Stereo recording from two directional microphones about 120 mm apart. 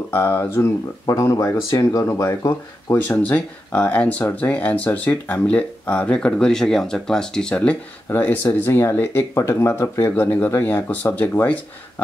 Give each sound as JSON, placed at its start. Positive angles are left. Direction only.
{"t": 0.1, "sound": "speech", "side_deg": 20}
{"t": 3.2, "sound": "speech", "side_deg": 10}